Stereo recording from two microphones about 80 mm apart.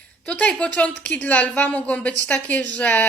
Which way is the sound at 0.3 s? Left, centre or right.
Centre.